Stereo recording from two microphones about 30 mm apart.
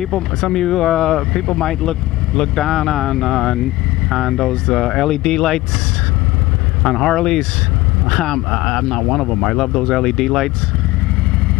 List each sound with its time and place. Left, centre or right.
0.1 s speech: centre
2.5 s speech: centre
5.1 s speech: centre
6.8 s speech: centre
9.7 s speech: centre